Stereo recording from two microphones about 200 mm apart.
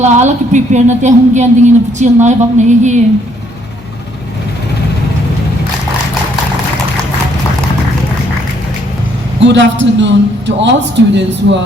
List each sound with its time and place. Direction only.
0.0 s a woman's voice: 35° right (ahead or behind)
9.4 s a man's voice: 65° right (ahead or behind)